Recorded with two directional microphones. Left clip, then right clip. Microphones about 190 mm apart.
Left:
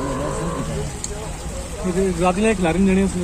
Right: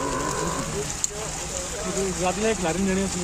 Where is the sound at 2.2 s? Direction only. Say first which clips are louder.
Left 5 dB; 20° left (ahead or behind).